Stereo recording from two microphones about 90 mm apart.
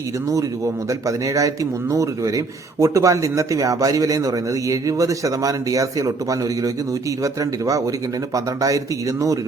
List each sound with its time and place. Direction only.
0.3 s speech: 35° right (ahead or behind)